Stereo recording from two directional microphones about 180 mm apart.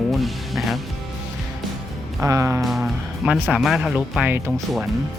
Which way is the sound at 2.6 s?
Centre (ahead or behind).